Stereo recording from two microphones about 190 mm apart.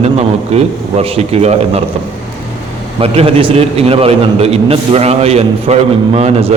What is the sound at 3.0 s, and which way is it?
A man's voice, 30° right (ahead or behind).